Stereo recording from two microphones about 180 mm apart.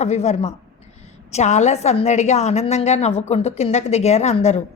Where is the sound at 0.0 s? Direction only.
40° left (ahead or behind).